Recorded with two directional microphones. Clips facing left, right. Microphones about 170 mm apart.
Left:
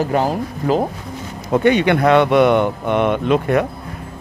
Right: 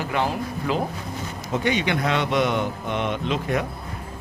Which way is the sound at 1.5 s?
60° left (ahead or behind).